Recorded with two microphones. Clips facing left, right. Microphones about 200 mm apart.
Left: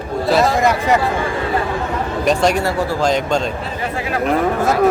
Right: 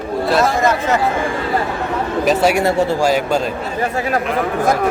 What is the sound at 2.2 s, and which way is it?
A man's voice, 5° right (ahead or behind).